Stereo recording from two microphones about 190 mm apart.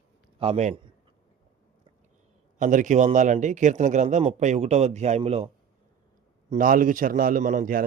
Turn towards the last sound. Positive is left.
turn(degrees=-45)  # may be behind; listen again after turning